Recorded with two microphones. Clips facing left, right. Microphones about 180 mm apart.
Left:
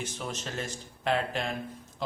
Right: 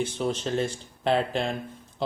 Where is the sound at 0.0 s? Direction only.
30° right (ahead or behind).